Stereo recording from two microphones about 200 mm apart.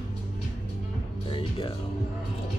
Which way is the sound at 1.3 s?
25° left (ahead or behind).